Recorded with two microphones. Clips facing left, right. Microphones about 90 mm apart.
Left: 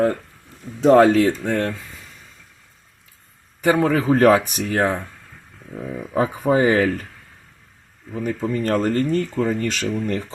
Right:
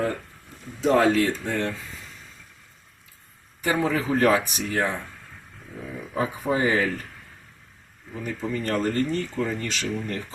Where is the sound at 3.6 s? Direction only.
55° left (ahead or behind).